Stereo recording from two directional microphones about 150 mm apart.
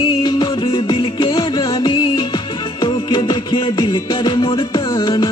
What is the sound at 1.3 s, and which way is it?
Music, 25° left (ahead or behind).